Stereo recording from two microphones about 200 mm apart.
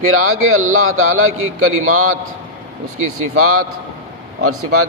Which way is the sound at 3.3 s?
90° right.